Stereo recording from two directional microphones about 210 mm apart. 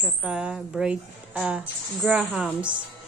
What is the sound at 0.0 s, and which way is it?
Speech, 5° right (ahead or behind).